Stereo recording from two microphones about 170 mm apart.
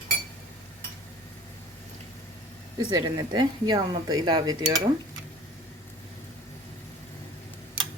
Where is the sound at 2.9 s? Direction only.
25° right (ahead or behind).